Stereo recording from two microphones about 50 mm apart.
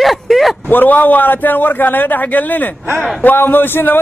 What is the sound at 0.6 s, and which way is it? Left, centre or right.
A man's voice, left.